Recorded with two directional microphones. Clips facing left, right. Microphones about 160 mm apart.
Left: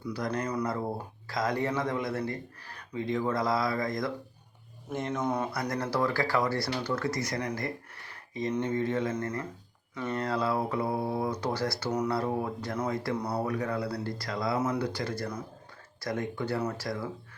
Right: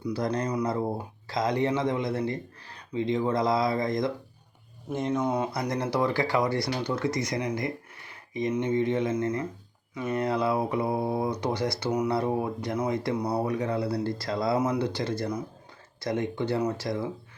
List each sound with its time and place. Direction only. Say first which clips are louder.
0.0 s speech: right 4 dB; 25° right (ahead or behind)
0.6 s speech: right 4 dB; 20° right (ahead or behind)
9.9 s speech: right 3 dB; 10° right (ahead or behind)